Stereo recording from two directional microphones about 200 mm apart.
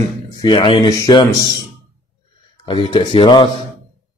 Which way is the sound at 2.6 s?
25° left (ahead or behind).